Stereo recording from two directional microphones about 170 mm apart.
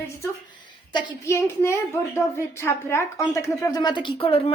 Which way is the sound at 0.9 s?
15° left (ahead or behind).